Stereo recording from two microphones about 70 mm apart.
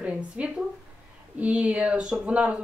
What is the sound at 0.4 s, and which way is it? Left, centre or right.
Speech, centre.